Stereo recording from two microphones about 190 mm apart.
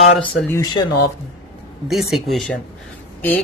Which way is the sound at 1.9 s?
Centre (ahead or behind).